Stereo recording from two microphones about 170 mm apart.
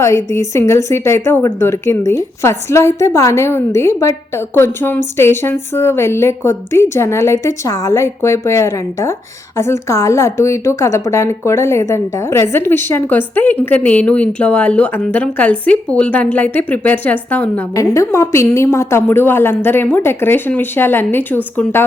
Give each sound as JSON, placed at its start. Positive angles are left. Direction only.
{"t": 0.0, "sound": "a woman's voice", "side_deg": 15}